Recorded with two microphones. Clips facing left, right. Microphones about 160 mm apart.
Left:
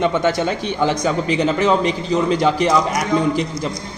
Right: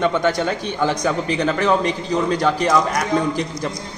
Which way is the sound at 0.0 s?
15° left (ahead or behind).